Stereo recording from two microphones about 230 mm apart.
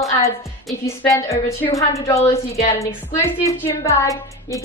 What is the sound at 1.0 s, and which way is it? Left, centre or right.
A woman's voice, centre.